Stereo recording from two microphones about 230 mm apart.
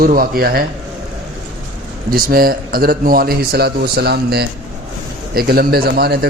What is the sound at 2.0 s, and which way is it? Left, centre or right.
A man's voice, right.